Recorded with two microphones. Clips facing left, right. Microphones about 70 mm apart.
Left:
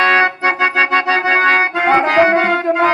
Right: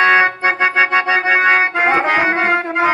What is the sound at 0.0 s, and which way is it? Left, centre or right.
Organ, centre.